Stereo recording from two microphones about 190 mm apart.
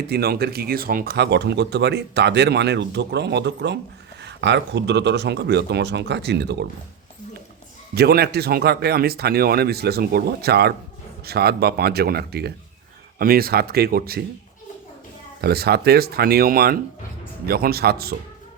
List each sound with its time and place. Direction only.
0.1 s speech: 55° right (ahead or behind)
7.9 s speech: 55° right (ahead or behind)
15.4 s speech: 55° right (ahead or behind)